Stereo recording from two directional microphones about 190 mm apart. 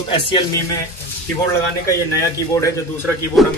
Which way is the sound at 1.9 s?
15° left (ahead or behind).